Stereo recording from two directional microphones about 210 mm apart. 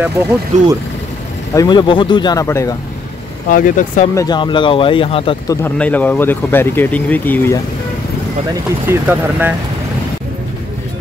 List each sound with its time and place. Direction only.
0.2 s speech: 15° right (ahead or behind)
0.5 s speech: 35° right (ahead or behind)
1.5 s speech: 20° left (ahead or behind)
3.4 s speech: 40° left (ahead or behind)
4.1 s speech: 15° left (ahead or behind)
5.6 s speech: 5° left (ahead or behind)
8.8 s speech: 10° right (ahead or behind)